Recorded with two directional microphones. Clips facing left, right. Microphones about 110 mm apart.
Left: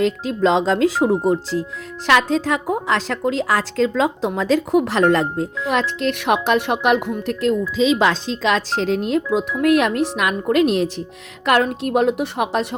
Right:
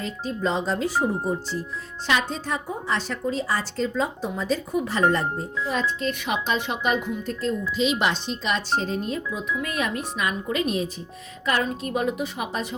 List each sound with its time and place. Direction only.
0.0 s a woman's voice: 90° left; by 7.5 s 75° left (ahead or behind)
8.3 s speech: 90° left
11.4 s speech: 65° left (ahead or behind)